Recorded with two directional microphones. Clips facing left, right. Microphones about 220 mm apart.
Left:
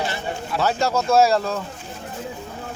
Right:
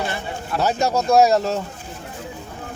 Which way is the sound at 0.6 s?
20° right (ahead or behind).